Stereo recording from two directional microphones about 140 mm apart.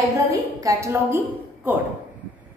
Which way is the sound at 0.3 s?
25° right (ahead or behind).